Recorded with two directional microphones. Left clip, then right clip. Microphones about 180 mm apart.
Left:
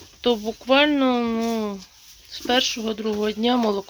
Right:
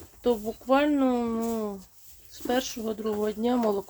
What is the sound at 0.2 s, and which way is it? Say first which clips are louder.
Speech: left 4 dB; 10° left (ahead or behind).